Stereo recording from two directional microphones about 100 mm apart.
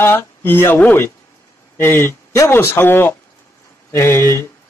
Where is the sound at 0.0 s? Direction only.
20° left (ahead or behind).